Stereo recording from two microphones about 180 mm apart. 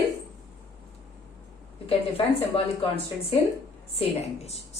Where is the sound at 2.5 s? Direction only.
30° left (ahead or behind).